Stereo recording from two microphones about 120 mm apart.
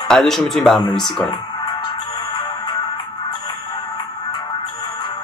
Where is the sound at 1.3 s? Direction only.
40° left (ahead or behind).